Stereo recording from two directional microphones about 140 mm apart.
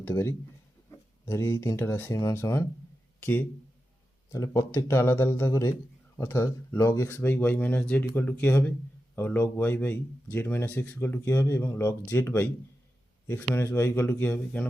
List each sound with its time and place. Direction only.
0.0 s speech: 15° left (ahead or behind)
4.3 s speech: 25° left (ahead or behind)